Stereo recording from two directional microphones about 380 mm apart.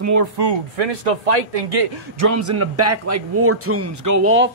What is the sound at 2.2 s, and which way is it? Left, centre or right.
A man's voice, right.